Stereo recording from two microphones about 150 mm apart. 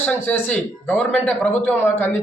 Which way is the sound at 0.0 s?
10° left (ahead or behind).